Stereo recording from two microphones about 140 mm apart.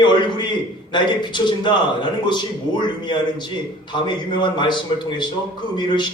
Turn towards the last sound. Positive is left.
turn(degrees=35)  # may be behind; listen again after turning